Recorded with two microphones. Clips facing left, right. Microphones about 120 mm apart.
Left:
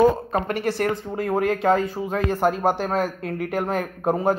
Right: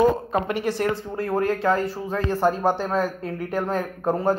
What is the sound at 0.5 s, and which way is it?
A man's voice, centre (ahead or behind).